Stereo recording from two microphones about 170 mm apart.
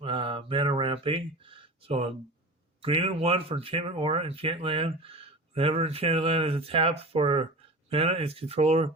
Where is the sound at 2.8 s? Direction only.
35° right (ahead or behind).